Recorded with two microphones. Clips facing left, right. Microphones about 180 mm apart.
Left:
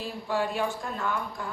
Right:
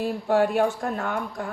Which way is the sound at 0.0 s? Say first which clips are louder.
Right 8 dB; 55° right (ahead or behind).